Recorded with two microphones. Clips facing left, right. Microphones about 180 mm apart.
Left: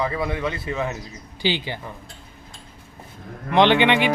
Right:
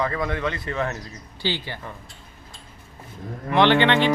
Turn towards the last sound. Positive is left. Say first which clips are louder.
# even
turn(degrees=15)  # may be behind; listen again after turning